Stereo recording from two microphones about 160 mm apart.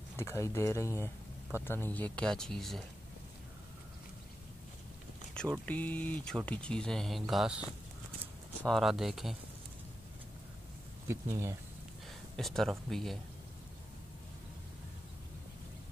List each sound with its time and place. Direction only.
0.2 s speech: 15° left (ahead or behind)
5.4 s a sound: 5° left (ahead or behind)
5.7 s speech: 10° left (ahead or behind)
11.1 s speech: 20° right (ahead or behind)
12.4 s speech: centre (ahead or behind)